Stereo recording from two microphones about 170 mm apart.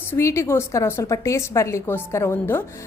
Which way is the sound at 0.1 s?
15° left (ahead or behind).